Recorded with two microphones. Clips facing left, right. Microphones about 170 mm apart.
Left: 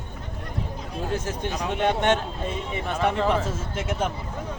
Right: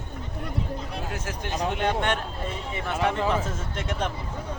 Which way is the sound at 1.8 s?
20° left (ahead or behind).